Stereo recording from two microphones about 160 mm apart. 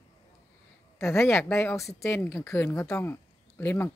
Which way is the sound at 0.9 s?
15° left (ahead or behind).